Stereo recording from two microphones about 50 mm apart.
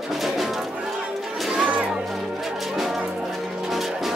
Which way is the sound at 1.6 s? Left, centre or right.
Right.